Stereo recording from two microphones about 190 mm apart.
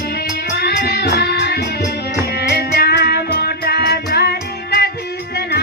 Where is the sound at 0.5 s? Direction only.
55° left (ahead or behind).